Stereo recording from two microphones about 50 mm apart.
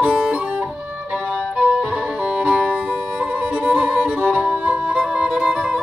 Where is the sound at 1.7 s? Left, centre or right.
Centre.